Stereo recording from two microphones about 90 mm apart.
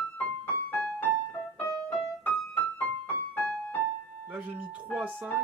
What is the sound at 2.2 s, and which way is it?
Keyboard, 15° left (ahead or behind).